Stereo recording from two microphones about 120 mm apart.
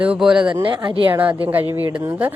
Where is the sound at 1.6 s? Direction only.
40° left (ahead or behind).